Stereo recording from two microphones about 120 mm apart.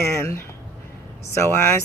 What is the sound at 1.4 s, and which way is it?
Speech, 20° left (ahead or behind).